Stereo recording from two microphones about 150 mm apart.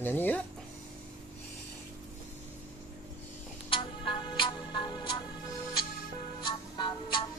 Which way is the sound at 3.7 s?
35° left (ahead or behind).